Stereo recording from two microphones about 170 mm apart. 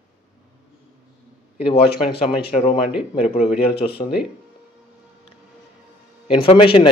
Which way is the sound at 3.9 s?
70° left (ahead or behind).